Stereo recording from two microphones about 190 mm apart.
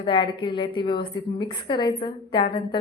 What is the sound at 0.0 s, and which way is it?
A woman's voice, 25° left (ahead or behind).